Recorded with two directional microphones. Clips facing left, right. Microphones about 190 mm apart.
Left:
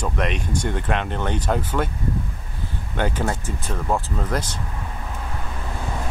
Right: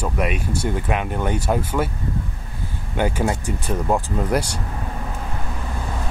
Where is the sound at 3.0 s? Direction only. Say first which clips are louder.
Right 3 dB; 10° right (ahead or behind).